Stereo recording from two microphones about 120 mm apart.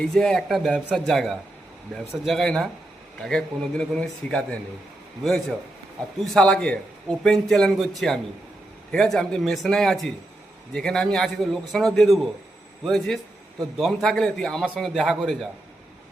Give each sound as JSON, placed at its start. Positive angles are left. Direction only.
{"t": 0.1, "sound": "a man's voice", "side_deg": 5}